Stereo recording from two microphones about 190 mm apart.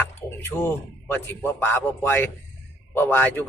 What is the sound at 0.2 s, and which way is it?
A man's voice, 10° left (ahead or behind).